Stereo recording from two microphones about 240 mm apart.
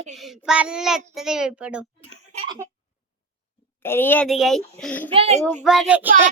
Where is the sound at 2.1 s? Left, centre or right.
Right.